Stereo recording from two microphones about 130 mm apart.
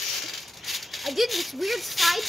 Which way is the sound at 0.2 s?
Centre (ahead or behind).